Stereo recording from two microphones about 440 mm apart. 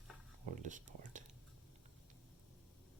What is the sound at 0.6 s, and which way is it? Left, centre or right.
Whispering, centre.